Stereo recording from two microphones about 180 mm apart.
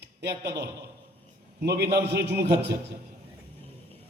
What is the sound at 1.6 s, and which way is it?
Speech, 65° right (ahead or behind).